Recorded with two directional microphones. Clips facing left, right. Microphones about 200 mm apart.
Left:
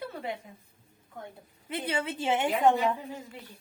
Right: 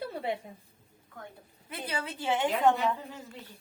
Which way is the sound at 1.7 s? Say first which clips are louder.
Left 5 dB; 25° left (ahead or behind).